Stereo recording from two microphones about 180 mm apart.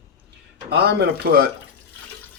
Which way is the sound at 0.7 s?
60° right (ahead or behind).